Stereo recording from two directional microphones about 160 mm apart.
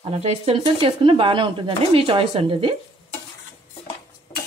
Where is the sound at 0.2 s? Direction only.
40° right (ahead or behind).